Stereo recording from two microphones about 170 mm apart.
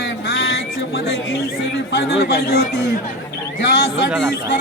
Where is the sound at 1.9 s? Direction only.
65° left (ahead or behind).